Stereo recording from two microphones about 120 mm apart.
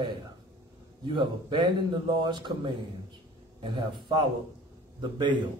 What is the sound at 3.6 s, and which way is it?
Speech, 40° right (ahead or behind).